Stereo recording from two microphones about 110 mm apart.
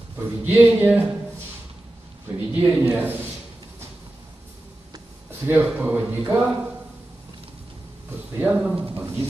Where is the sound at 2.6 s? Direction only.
20° right (ahead or behind).